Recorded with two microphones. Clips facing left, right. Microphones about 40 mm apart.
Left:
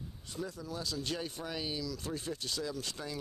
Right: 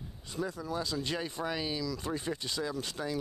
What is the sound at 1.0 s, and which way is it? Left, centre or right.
Speech, right.